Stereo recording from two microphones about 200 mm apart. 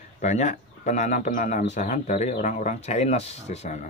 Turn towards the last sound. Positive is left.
turn(degrees=35)  # may be behind; listen again after turning